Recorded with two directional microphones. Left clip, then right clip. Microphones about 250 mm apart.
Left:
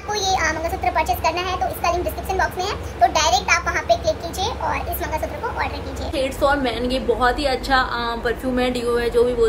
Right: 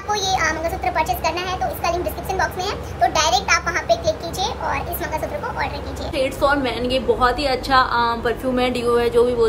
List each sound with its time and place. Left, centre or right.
0.1 s a child's voice: centre